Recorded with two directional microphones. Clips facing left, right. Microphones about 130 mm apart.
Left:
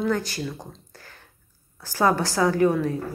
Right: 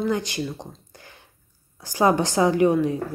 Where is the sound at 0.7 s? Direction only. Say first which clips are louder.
Even; 20° right (ahead or behind).